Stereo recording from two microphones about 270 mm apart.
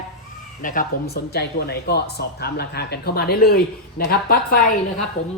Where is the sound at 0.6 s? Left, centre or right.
Left.